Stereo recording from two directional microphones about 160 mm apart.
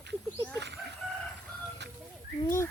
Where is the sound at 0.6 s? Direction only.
90° right.